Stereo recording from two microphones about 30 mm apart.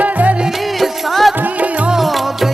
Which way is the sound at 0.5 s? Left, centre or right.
Centre.